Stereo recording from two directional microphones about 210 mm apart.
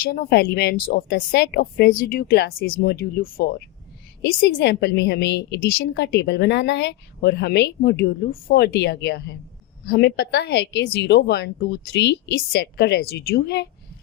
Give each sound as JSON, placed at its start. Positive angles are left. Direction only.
{"t": 0.0, "sound": "a woman's voice", "side_deg": 45}